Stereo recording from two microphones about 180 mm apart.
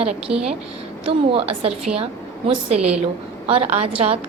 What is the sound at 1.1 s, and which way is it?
Speech, 30° right (ahead or behind).